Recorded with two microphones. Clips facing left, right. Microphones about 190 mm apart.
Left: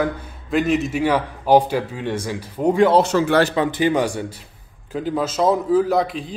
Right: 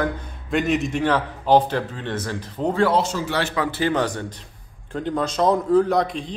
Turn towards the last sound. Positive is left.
turn(degrees=5)  # may be behind; listen again after turning